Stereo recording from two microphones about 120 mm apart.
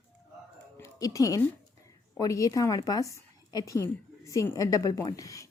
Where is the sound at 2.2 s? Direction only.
30° left (ahead or behind).